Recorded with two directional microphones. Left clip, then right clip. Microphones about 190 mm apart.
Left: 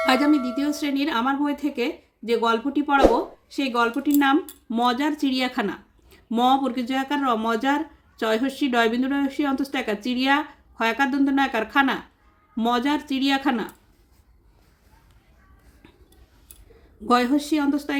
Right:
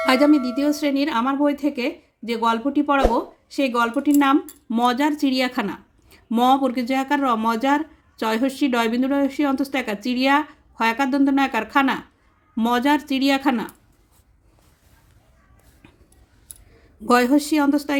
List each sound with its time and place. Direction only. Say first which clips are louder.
0.0 s speech: right 3 dB; 20° right (ahead or behind)
17.1 s speech: right 3 dB; 25° right (ahead or behind)